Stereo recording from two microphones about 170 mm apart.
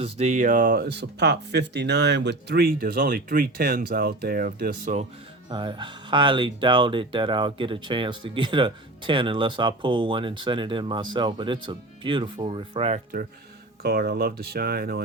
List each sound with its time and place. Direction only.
0.0 s speech: 40° right (ahead or behind); by 4.9 s 60° right (ahead or behind)
5.5 s speech: 30° right (ahead or behind)
13.8 s speech: 70° right (ahead or behind)